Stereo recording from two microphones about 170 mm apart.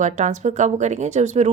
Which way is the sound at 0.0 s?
45° right (ahead or behind).